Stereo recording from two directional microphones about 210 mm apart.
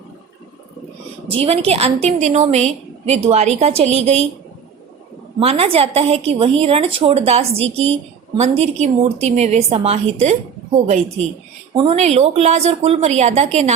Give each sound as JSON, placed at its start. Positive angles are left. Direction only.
{"t": 1.3, "sound": "a woman's voice", "side_deg": -25}
{"t": 5.4, "sound": "a woman's voice", "side_deg": -30}
{"t": 11.8, "sound": "a woman's voice", "side_deg": -30}